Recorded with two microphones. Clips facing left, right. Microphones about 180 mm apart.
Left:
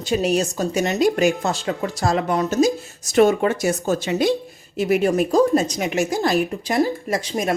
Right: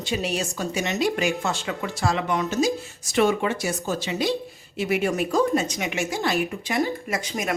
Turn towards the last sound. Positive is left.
turn(degrees=30)  # may be behind; listen again after turning